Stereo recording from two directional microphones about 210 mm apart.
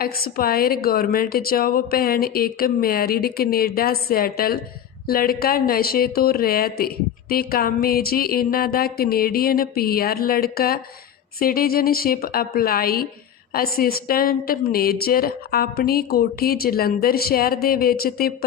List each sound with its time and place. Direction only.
0.0 s a woman's voice: 45° left (ahead or behind)